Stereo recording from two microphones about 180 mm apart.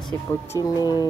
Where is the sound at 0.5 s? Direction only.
20° left (ahead or behind).